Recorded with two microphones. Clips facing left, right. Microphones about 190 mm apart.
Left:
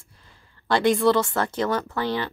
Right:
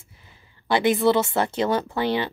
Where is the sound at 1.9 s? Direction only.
25° right (ahead or behind).